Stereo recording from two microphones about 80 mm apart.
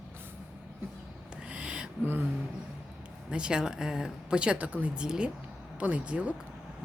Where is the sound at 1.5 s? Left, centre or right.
Centre.